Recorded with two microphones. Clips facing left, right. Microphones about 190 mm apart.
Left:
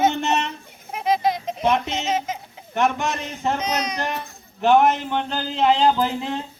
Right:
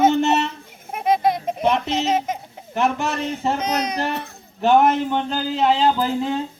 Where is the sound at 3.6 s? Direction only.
55° right (ahead or behind).